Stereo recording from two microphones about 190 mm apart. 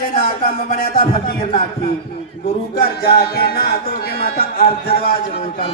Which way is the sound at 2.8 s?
55° left (ahead or behind).